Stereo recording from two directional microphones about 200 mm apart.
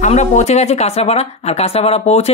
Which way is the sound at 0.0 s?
35° left (ahead or behind).